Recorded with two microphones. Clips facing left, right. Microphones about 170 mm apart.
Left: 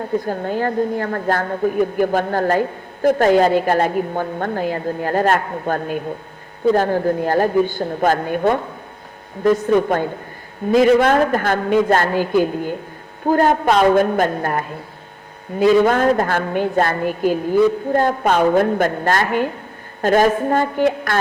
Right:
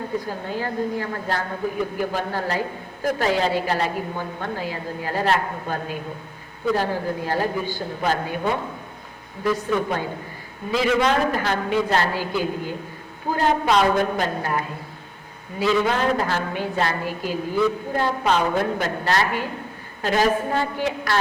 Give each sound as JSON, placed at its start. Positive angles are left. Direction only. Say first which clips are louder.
{"t": 0.3, "sound": "a woman's voice", "louder": "left 7 dB", "side_deg": 50}
{"t": 9.7, "sound": "a woman's voice", "louder": "left 7 dB", "side_deg": 50}